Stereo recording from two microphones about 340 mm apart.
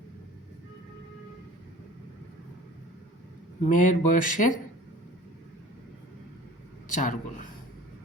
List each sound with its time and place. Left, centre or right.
3.6 s speech: left
6.8 s speech: left